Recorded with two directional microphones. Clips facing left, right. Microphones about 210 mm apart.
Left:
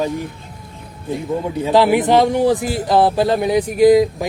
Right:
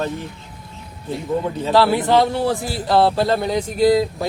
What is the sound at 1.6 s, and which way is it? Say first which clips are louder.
A man's voice: left 3 dB; 15° left (ahead or behind).